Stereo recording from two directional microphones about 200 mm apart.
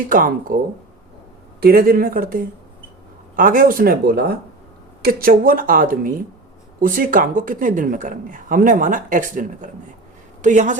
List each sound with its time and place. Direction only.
0.1 s speech: 45° right (ahead or behind)
1.6 s speech: 50° right (ahead or behind)